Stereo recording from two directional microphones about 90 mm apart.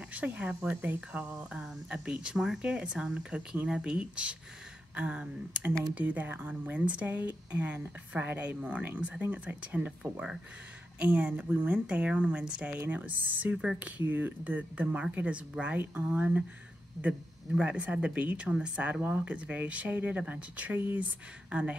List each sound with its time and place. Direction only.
0.1 s speech: 15° right (ahead or behind)
13.6 s speech: 5° right (ahead or behind)
13.9 s speech: 20° right (ahead or behind)